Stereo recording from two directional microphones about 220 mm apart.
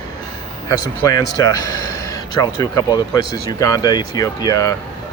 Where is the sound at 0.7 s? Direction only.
15° left (ahead or behind).